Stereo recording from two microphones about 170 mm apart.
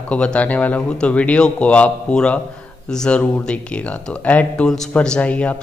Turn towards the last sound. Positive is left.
turn(degrees=10)  # may be behind; listen again after turning